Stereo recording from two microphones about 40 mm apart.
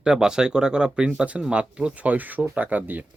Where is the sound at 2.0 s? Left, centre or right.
Right.